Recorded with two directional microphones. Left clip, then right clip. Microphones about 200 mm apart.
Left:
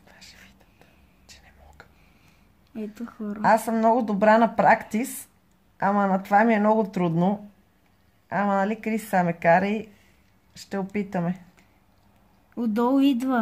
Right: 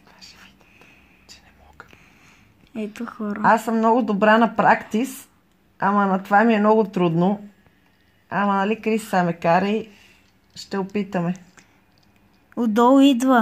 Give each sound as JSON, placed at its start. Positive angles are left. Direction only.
{"t": 3.0, "sound": "speech", "side_deg": -20}
{"t": 5.8, "sound": "speech", "side_deg": -10}